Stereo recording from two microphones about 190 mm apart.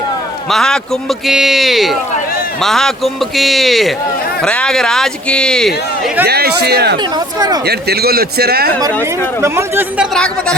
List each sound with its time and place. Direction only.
0.5 s a man's voice: 5° left (ahead or behind)
6.2 s speech: 60° right (ahead or behind)
7.3 s speech: 20° right (ahead or behind)
7.6 s speech: 60° right (ahead or behind)
9.4 s speech: 10° right (ahead or behind)